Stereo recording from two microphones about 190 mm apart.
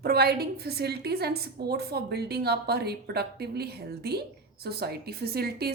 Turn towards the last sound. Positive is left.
turn(degrees=-55)  # may be behind; listen again after turning